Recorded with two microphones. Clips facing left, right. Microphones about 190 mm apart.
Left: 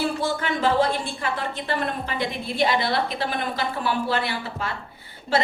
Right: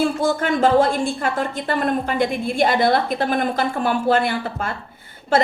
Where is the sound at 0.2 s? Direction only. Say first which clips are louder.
Right 6 dB; 45° right (ahead or behind).